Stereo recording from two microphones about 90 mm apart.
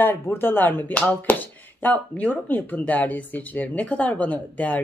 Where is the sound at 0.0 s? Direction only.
25° left (ahead or behind).